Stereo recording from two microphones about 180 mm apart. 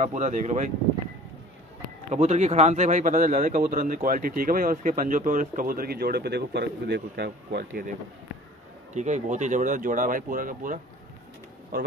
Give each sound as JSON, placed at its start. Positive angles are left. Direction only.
{"t": 0.0, "sound": "speech", "side_deg": -40}
{"t": 2.0, "sound": "a man's voice", "side_deg": -40}
{"t": 8.9, "sound": "a man's voice", "side_deg": -40}